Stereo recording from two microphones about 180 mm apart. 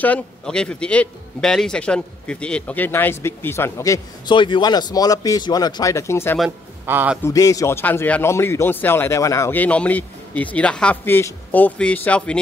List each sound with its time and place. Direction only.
0.0 s speech: 5° left (ahead or behind)
6.9 s a man's voice: 10° right (ahead or behind)
7.2 s speech: 20° left (ahead or behind)